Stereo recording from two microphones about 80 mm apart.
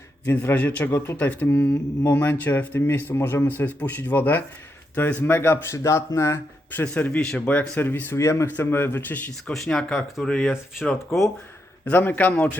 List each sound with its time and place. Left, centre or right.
0.3 s speech: left
0.5 s speech: centre
0.9 s speech: left
1.1 s speech: centre; by 6.4 s left
6.7 s speech: centre
7.4 s speech: left
8.1 s speech: left
8.5 s speech: left
9.5 s speech: centre
11.9 s speech: left